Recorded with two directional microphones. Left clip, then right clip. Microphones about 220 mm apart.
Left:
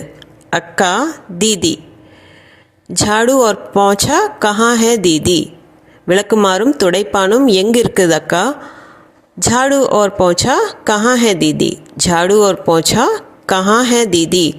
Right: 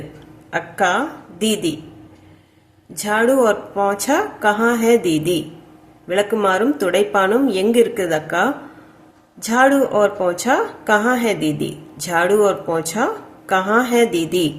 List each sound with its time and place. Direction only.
0.5 s speech: 40° left (ahead or behind)
2.9 s speech: 40° left (ahead or behind)